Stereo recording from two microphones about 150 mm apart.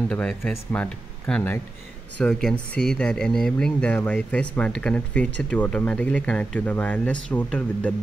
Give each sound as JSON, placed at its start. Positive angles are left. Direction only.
{"t": 0.1, "sound": "speech", "side_deg": 5}